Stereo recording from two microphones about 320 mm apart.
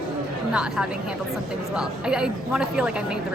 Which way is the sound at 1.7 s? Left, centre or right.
Centre.